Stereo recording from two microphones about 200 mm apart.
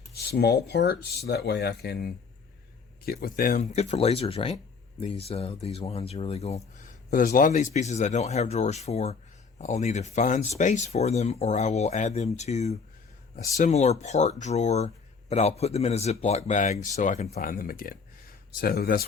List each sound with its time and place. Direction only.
0.1 s speech: 50° left (ahead or behind); by 6.6 s 30° left (ahead or behind)
7.1 s speech: 45° left (ahead or behind)
17.4 s speech: 45° left (ahead or behind)